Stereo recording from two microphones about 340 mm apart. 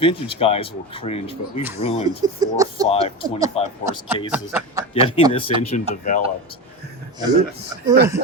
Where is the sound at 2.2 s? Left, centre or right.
Centre.